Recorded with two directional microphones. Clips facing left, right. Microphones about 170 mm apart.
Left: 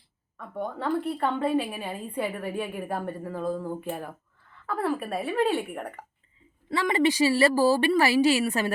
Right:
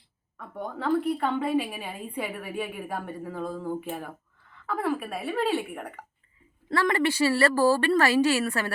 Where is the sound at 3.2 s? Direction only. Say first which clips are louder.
Even; centre (ahead or behind).